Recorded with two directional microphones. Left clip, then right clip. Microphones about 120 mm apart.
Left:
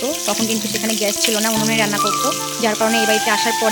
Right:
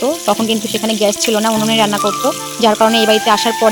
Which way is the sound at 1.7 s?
45° right (ahead or behind).